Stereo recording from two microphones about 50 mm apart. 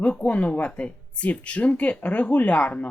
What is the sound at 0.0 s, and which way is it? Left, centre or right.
Speech, left.